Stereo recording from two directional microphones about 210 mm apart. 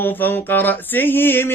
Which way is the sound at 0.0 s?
10° left (ahead or behind).